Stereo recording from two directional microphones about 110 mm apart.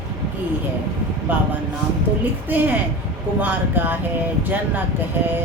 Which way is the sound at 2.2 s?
15° right (ahead or behind).